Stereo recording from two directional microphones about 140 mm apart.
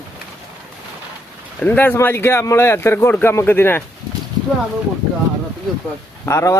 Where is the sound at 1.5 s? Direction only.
10° left (ahead or behind).